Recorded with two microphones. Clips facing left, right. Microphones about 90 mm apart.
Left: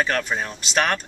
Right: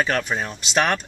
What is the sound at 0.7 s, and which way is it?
Speech, 20° right (ahead or behind).